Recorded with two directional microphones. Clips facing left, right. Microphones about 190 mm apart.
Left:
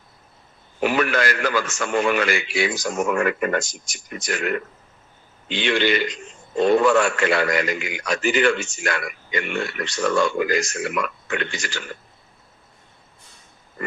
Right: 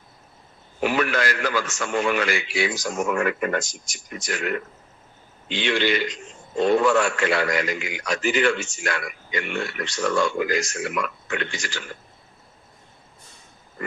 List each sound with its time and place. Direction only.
0.9 s a man's voice: 60° left (ahead or behind)